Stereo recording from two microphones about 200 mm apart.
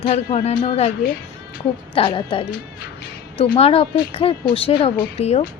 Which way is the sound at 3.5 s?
30° left (ahead or behind).